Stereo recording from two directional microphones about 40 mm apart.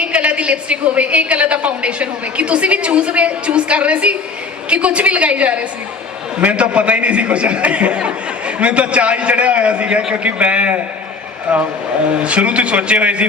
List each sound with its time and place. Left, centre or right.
0.0 s a woman's voice: right
12.2 s a woman's voice: right